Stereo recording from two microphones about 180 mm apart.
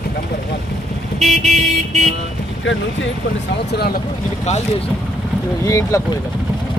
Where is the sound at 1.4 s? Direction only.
40° right (ahead or behind).